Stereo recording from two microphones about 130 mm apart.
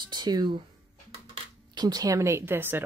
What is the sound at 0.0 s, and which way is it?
Speech, 35° right (ahead or behind).